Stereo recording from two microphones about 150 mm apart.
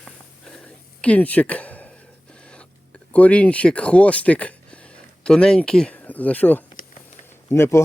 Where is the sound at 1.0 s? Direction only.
10° left (ahead or behind).